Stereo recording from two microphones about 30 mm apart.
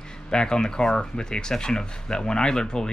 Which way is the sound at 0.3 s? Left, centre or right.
Left.